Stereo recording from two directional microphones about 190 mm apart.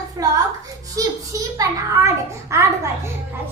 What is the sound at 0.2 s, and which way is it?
Hands, 20° right (ahead or behind).